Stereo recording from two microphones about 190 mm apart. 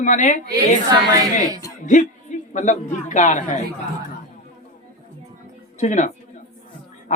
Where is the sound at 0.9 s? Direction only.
20° right (ahead or behind).